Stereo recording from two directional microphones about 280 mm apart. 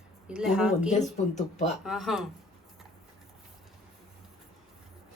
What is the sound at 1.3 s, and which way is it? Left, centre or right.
Speech, left.